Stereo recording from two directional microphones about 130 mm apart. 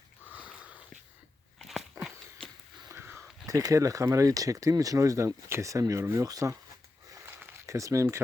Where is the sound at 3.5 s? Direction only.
25° right (ahead or behind).